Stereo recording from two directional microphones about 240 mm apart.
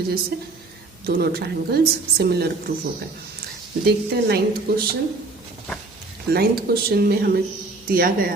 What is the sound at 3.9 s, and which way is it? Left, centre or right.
A woman's voice, right.